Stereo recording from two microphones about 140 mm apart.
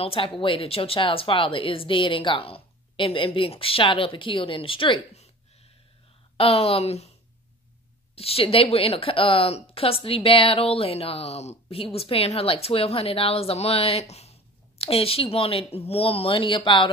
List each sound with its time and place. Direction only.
0.0 s a woman's voice: 40° left (ahead or behind)
5.1 s a sound: 50° left (ahead or behind)
6.3 s a woman's voice: 45° left (ahead or behind)
8.2 s a woman's voice: 45° left (ahead or behind)